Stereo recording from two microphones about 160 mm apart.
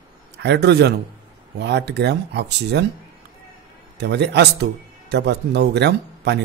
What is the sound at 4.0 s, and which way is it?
A man's voice, 90° right.